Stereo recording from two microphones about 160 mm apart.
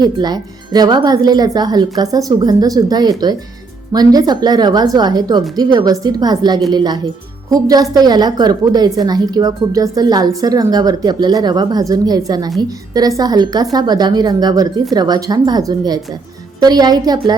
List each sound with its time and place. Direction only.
0.0 s a woman's voice: 25° right (ahead or behind)